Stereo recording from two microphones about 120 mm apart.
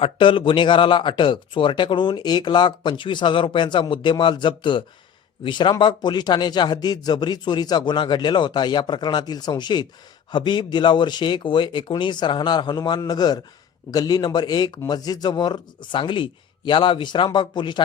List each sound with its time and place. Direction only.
0.0 s speech: 45° left (ahead or behind)